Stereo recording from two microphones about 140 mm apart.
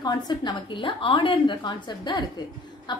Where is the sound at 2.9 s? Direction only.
30° left (ahead or behind).